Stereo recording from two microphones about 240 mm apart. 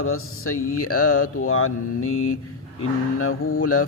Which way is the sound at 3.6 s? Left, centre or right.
Left.